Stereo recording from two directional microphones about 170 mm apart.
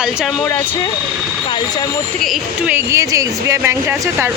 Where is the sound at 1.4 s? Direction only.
25° left (ahead or behind).